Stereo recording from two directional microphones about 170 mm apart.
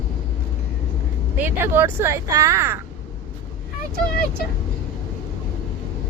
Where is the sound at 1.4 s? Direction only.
10° right (ahead or behind).